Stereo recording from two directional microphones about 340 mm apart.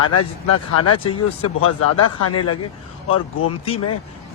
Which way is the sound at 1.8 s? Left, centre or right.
Left.